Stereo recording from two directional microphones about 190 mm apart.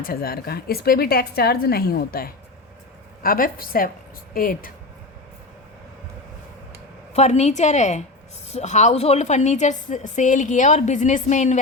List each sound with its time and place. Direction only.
0.0 s a woman's voice: 50° left (ahead or behind)
7.1 s a woman's voice: 35° left (ahead or behind)